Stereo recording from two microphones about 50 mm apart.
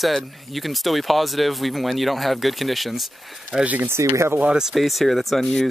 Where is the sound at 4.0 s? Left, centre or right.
Right.